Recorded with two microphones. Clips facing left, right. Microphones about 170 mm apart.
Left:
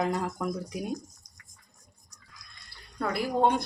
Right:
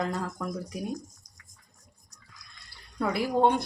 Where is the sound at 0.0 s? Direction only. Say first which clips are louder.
Left 2 dB; 15° left (ahead or behind).